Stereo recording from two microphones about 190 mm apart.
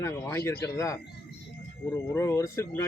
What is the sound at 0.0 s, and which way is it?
Speech, 15° left (ahead or behind).